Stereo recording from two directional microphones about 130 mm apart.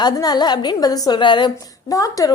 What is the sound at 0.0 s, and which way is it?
A woman's voice, 30° left (ahead or behind).